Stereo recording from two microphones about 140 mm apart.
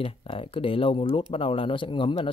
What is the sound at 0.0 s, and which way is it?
Speech, 40° left (ahead or behind).